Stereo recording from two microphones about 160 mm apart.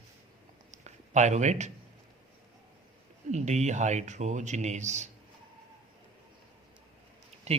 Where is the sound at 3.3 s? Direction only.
45° right (ahead or behind).